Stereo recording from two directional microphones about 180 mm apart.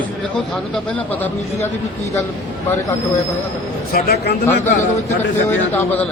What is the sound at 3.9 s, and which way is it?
Speech, 60° left (ahead or behind).